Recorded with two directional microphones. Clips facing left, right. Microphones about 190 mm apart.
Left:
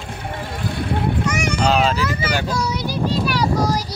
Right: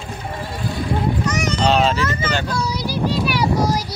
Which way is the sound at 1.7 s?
Centre (ahead or behind).